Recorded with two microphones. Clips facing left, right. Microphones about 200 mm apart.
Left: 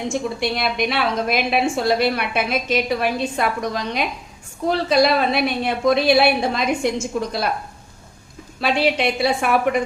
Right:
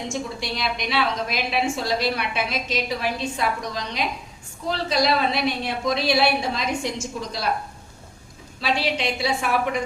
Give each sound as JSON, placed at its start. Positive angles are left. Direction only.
{"t": 0.1, "sound": "a woman's voice", "side_deg": 55}
{"t": 8.6, "sound": "a woman's voice", "side_deg": 55}